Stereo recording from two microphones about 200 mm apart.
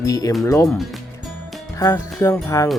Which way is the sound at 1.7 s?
15° left (ahead or behind).